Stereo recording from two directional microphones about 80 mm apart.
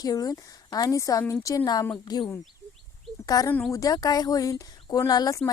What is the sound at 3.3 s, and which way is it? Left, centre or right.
A woman's voice, left.